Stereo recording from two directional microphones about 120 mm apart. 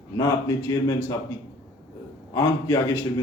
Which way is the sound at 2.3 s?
25° left (ahead or behind).